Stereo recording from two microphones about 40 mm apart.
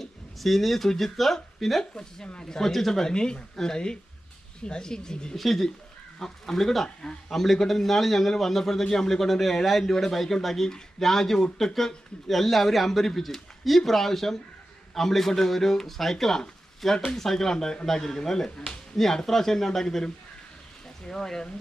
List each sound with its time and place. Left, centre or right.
0.0 s speech: centre
5.3 s speech: centre
7.0 s speech: centre
7.3 s speech: centre